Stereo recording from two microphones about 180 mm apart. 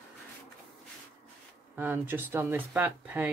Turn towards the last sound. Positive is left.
turn(degrees=-10)  # may be behind; listen again after turning